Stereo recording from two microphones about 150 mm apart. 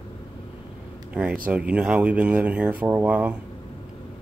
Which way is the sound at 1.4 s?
10° right (ahead or behind).